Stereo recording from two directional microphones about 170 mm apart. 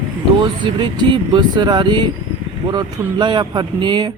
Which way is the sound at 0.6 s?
25° right (ahead or behind).